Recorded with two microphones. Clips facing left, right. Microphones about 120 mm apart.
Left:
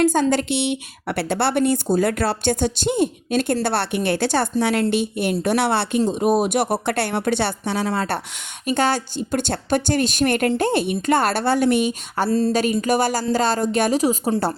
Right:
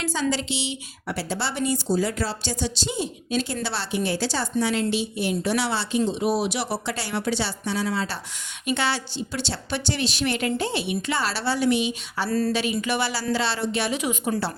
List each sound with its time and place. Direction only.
0.0 s a woman's voice: 50° left (ahead or behind)
8.6 s a woman's voice: 45° left (ahead or behind)
12.3 s speech: 25° left (ahead or behind)
12.5 s a woman's voice: 45° left (ahead or behind)